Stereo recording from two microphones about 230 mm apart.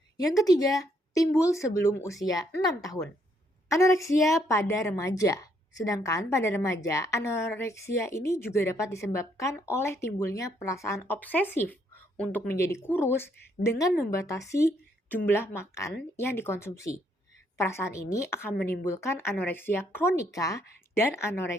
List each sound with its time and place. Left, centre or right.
0.2 s a woman's voice: centre